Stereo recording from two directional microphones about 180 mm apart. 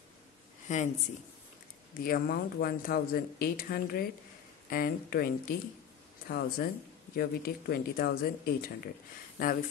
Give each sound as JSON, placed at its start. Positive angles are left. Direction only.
{"t": 0.7, "sound": "speech", "side_deg": 45}
{"t": 2.0, "sound": "speech", "side_deg": 55}